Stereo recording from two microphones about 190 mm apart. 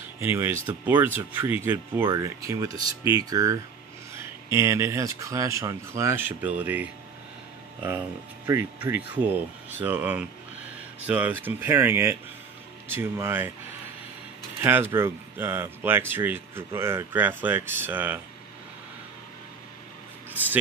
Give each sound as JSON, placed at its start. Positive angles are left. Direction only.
{"t": 0.2, "sound": "speech", "side_deg": -10}
{"t": 8.5, "sound": "speech", "side_deg": -10}
{"t": 14.6, "sound": "speech", "side_deg": -10}